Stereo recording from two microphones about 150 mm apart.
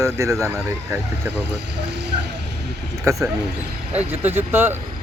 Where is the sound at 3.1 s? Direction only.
20° right (ahead or behind).